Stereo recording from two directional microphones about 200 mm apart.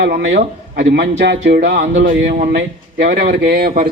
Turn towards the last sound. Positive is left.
turn(degrees=-50)  # may be behind; listen again after turning